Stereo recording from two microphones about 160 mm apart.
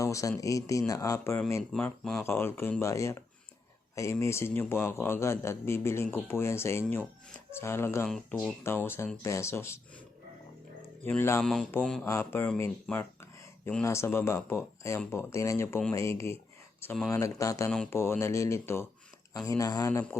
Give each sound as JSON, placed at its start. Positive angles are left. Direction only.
{"t": 0.0, "sound": "speech", "side_deg": 20}
{"t": 1.7, "sound": "a man's voice", "side_deg": 5}
{"t": 8.0, "sound": "speech", "side_deg": 0}
{"t": 8.6, "sound": "a man's voice", "side_deg": 15}
{"t": 11.0, "sound": "a man's voice", "side_deg": 15}
{"t": 17.1, "sound": "a man's voice", "side_deg": 20}